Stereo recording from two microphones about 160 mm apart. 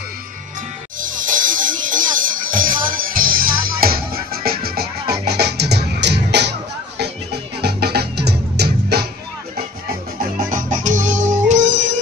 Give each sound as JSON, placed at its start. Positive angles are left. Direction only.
{"t": 0.9, "sound": "music", "side_deg": -55}
{"t": 7.6, "sound": "music", "side_deg": -90}
{"t": 10.4, "sound": "music", "side_deg": -55}